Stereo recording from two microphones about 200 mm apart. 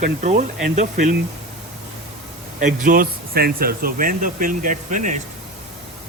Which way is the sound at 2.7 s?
45° right (ahead or behind).